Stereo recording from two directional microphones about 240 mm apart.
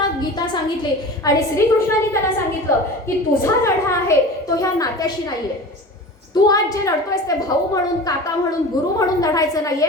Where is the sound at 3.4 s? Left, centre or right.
Centre.